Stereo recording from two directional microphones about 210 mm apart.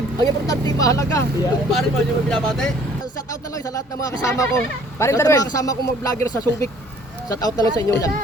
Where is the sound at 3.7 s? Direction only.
15° left (ahead or behind).